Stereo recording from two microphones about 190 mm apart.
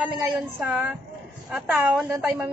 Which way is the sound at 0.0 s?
5° right (ahead or behind).